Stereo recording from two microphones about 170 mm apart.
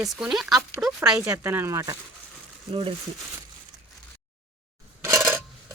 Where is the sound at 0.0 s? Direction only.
Centre (ahead or behind).